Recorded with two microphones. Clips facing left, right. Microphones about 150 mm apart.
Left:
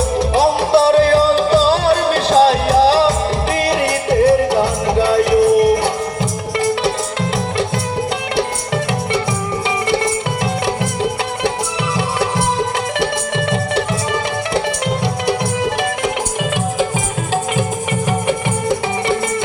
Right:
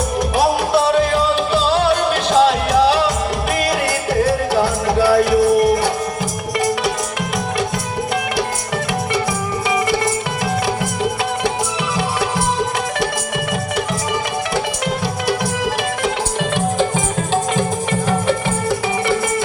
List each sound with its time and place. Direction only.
0.2 s music: 25° left (ahead or behind)
9.9 s music: 25° left (ahead or behind)
11.9 s music: 25° left (ahead or behind)
16.4 s music: 10° left (ahead or behind)
18.3 s music: 20° left (ahead or behind)